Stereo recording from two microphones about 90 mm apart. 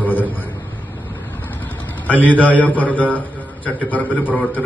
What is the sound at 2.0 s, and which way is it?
A man's voice, 20° left (ahead or behind).